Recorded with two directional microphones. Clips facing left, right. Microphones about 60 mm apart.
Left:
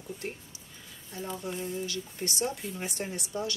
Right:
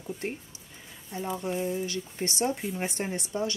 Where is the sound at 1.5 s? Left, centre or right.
Right.